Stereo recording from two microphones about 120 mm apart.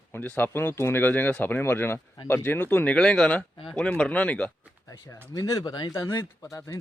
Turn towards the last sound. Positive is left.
turn(degrees=25)  # may be behind; listen again after turning